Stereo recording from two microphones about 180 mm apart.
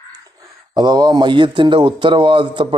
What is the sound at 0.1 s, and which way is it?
Speech, 20° right (ahead or behind).